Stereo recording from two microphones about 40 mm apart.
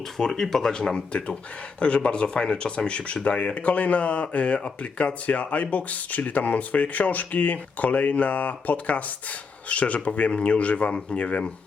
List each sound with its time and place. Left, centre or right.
0.0 s speech: centre; by 3.2 s left
3.4 s speech: left